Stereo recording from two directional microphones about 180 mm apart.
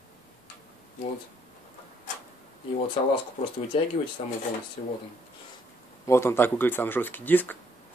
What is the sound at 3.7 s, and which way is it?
Speech, 30° left (ahead or behind).